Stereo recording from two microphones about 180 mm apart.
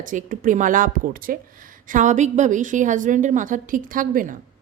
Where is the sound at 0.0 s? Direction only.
45° right (ahead or behind).